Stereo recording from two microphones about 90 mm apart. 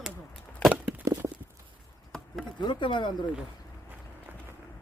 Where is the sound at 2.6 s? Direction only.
65° left (ahead or behind).